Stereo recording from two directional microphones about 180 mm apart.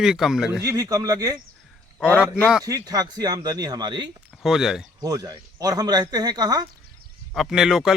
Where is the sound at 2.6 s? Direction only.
20° right (ahead or behind).